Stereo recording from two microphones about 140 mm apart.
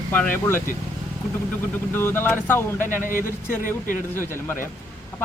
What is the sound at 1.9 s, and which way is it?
Speech, 15° left (ahead or behind).